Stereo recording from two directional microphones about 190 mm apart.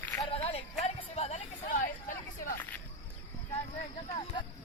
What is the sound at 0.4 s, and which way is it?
Music, 35° left (ahead or behind).